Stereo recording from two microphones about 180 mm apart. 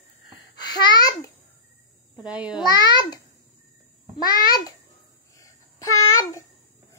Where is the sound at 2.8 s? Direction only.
25° left (ahead or behind).